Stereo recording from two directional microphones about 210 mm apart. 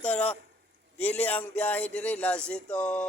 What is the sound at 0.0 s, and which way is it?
Speech, 5° left (ahead or behind).